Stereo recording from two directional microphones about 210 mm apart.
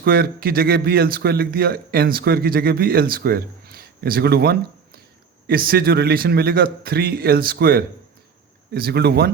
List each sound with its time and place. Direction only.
0.0 s a man's voice: 45° right (ahead or behind)